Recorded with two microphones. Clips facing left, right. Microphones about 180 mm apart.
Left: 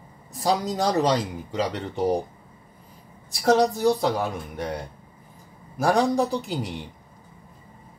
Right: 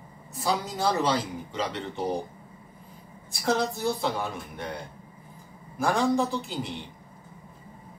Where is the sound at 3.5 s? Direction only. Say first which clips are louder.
Left 7 dB; 40° left (ahead or behind).